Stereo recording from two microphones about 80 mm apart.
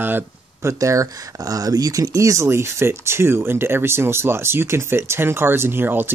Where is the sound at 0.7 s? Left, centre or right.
Right.